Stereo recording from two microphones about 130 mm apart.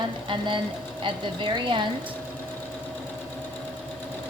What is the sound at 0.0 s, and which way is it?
A woman's voice, 35° right (ahead or behind).